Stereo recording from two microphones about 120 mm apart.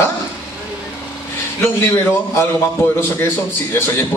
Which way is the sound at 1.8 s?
20° left (ahead or behind).